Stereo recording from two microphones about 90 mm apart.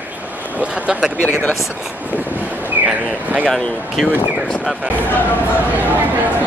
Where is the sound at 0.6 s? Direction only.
15° right (ahead or behind).